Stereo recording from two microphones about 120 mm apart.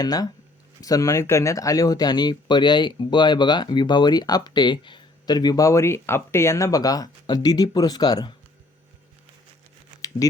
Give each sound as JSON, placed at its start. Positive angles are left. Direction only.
{"t": 0.0, "sound": "speech", "side_deg": 35}
{"t": 10.2, "sound": "speech", "side_deg": 30}